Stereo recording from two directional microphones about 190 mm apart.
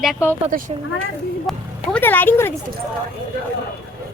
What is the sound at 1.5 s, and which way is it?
A woman's voice, centre (ahead or behind).